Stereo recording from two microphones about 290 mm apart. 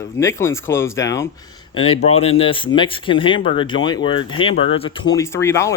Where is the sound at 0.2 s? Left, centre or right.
Centre.